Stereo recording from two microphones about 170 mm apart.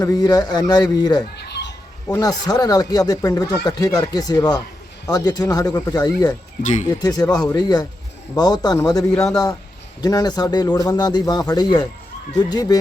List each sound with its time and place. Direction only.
0.0 s a man's voice: 25° left (ahead or behind)
1.4 s a sound: 80° left
2.1 s a man's voice: 20° left (ahead or behind)
6.6 s speech: 45° left (ahead or behind)
7.0 s a man's voice: 20° left (ahead or behind)
9.1 s a man's voice: 5° left (ahead or behind)
10.0 s a man's voice: 25° left (ahead or behind)